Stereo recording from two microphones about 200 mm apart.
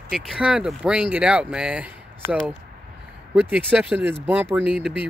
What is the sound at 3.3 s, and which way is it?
Speech, 5° right (ahead or behind).